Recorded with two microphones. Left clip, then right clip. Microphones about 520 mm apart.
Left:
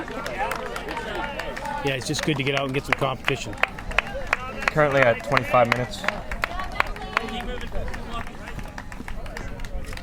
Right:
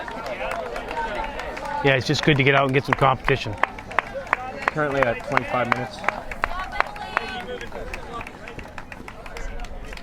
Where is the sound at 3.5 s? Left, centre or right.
Left.